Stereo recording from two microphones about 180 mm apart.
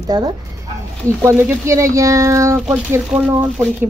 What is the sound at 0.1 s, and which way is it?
Speech, 20° right (ahead or behind).